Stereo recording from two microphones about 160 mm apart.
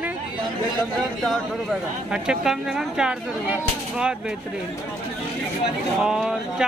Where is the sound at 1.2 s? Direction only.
Centre (ahead or behind).